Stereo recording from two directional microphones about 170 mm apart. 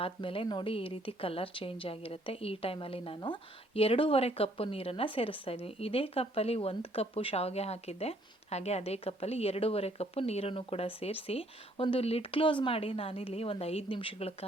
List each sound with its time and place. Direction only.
0.0 s a woman's voice: 30° left (ahead or behind)